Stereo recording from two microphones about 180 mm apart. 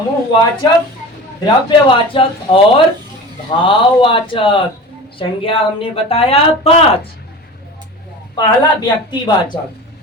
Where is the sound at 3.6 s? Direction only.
30° left (ahead or behind).